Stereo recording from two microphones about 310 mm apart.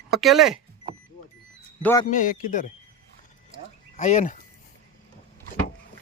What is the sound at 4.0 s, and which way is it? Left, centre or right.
Speech, left.